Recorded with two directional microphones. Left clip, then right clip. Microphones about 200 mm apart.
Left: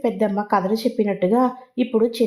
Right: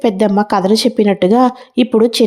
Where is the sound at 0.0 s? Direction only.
35° right (ahead or behind).